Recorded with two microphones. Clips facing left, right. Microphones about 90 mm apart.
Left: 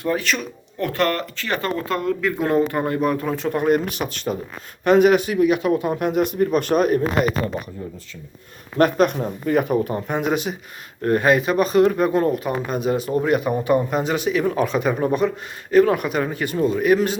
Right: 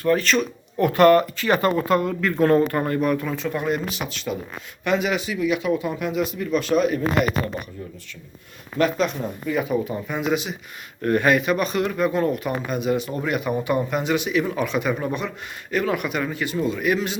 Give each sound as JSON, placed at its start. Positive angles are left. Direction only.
{"t": 0.0, "sound": "speech", "side_deg": 15}
{"t": 0.8, "sound": "speech", "side_deg": -10}
{"t": 2.3, "sound": "speech", "side_deg": 15}
{"t": 3.3, "sound": "a man's voice", "side_deg": 45}
{"t": 8.8, "sound": "a man's voice", "side_deg": 50}
{"t": 11.0, "sound": "speech", "side_deg": 30}